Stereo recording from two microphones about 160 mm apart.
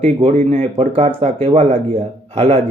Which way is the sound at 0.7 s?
40° right (ahead or behind).